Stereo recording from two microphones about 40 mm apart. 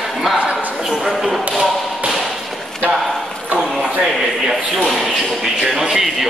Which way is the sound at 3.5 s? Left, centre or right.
Right.